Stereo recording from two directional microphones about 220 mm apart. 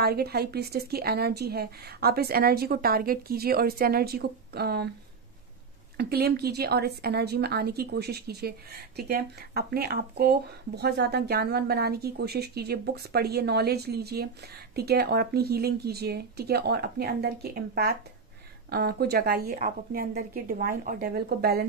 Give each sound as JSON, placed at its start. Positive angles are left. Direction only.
{"t": 0.0, "sound": "a woman's voice", "side_deg": -45}
{"t": 5.9, "sound": "a woman's voice", "side_deg": -45}